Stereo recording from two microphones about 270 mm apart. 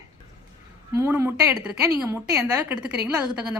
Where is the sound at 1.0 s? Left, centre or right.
Centre.